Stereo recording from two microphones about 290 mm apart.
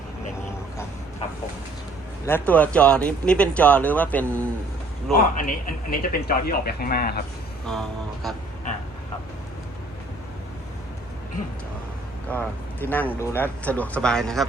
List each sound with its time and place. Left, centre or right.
2.2 s speech: centre
5.1 s speech: left
7.7 s speech: centre
12.3 s speech: centre